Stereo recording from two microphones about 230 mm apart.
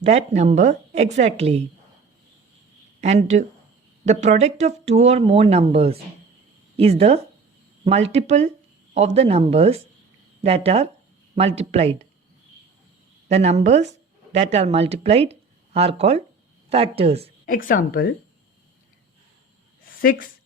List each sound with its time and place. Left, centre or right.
0.0 s speech: right
3.0 s speech: right
13.2 s speech: right
17.4 s speech: left
19.8 s a sound: left